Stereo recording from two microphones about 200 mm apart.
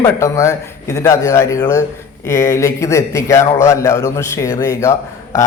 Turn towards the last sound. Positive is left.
turn(degrees=15)  # may be behind; listen again after turning